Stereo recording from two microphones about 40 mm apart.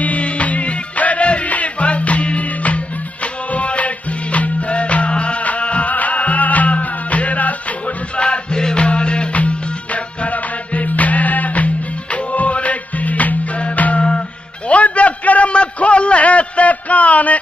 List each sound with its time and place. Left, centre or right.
0.0 s music: left
8.2 s music: left
14.7 s a sound: left